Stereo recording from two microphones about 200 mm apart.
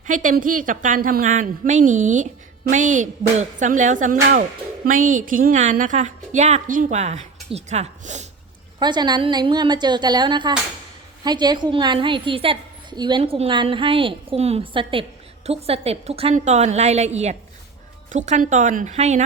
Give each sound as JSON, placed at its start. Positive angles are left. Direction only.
{"t": 0.1, "sound": "a woman's voice", "side_deg": -40}
{"t": 8.8, "sound": "a woman's voice", "side_deg": -20}